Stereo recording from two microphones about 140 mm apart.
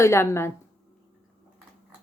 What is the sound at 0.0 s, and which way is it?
Speech, 20° left (ahead or behind).